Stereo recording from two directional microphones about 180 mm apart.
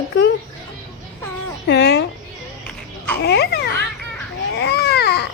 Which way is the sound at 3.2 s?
65° left (ahead or behind).